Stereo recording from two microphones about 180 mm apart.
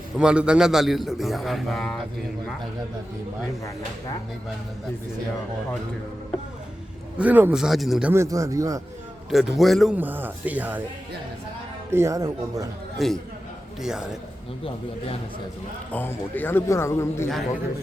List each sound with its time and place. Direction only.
0.2 s a man's voice: 5° right (ahead or behind)
3.6 s speech: 20° left (ahead or behind)
7.2 s a man's voice: 10° right (ahead or behind)
8.1 s speech: 15° right (ahead or behind)
9.3 s speech: centre (ahead or behind)
11.9 s speech: 15° right (ahead or behind)
13.0 s a man's voice: centre (ahead or behind)
14.6 s a man's voice: 30° left (ahead or behind)
15.9 s speech: 10° left (ahead or behind)